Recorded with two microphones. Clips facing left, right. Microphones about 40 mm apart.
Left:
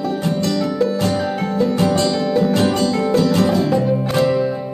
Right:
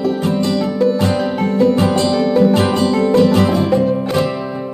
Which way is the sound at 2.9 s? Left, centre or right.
Centre.